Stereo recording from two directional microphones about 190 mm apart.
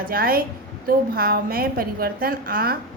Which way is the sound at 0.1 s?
50° right (ahead or behind).